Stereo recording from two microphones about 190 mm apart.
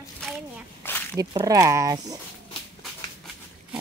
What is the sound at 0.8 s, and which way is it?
Dog, 10° left (ahead or behind).